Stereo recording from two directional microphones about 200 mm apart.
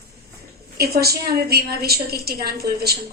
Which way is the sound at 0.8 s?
50° right (ahead or behind).